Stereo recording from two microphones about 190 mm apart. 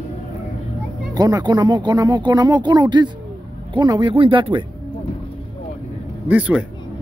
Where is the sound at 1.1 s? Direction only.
20° right (ahead or behind).